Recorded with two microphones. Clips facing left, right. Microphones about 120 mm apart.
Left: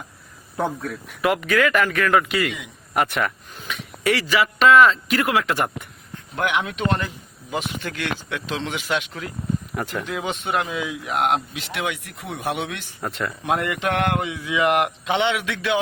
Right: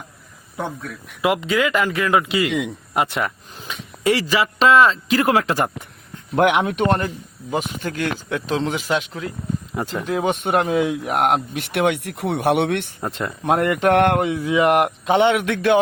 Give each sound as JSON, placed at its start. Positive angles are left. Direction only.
{"t": 0.5, "sound": "speech", "side_deg": 5}
{"t": 1.2, "sound": "speech", "side_deg": -20}
{"t": 2.5, "sound": "speech", "side_deg": -90}
{"t": 2.9, "sound": "speech", "side_deg": -20}
{"t": 6.3, "sound": "speech", "side_deg": -60}
{"t": 7.6, "sound": "speech", "side_deg": -40}
{"t": 10.2, "sound": "speech", "side_deg": -50}
{"t": 13.1, "sound": "speech", "side_deg": -35}